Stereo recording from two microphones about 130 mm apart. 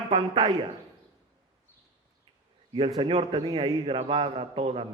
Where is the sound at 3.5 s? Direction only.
45° right (ahead or behind).